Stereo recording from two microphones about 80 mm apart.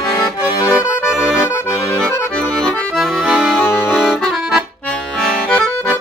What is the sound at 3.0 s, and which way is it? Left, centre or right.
Accordion, centre.